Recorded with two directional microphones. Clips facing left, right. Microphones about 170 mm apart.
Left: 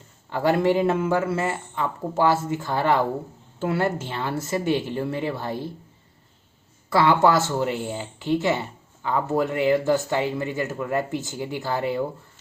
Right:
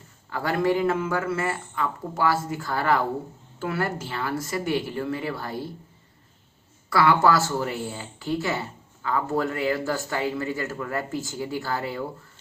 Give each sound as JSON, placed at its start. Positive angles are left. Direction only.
{"t": 0.3, "sound": "speech", "side_deg": 25}
{"t": 6.9, "sound": "speech", "side_deg": 25}